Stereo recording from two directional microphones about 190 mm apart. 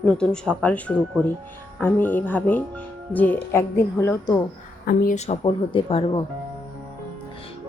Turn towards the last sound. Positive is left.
turn(degrees=30)  # may be behind; listen again after turning